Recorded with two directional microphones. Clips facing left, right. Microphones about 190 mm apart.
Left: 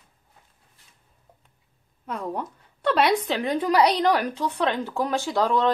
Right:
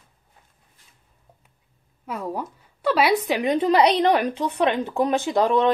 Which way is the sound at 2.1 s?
5° right (ahead or behind).